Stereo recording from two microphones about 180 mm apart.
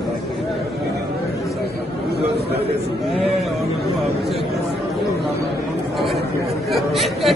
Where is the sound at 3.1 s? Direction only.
Centre (ahead or behind).